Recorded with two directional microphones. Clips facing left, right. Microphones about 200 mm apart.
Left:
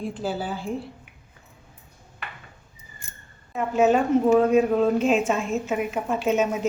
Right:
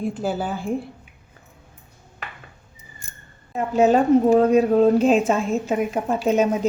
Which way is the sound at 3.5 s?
35° right (ahead or behind).